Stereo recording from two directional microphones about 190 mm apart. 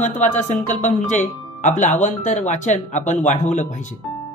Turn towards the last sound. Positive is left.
turn(degrees=40)  # may be behind; listen again after turning